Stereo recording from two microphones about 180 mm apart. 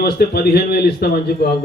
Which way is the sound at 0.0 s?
60° left (ahead or behind).